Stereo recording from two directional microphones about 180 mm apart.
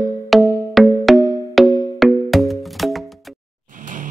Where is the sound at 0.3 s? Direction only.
Centre (ahead or behind).